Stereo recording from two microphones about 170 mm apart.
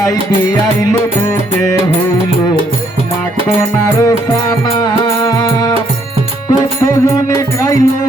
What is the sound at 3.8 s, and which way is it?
Music, 20° left (ahead or behind).